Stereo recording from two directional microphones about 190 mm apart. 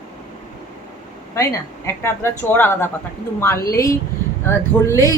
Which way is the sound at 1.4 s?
15° left (ahead or behind).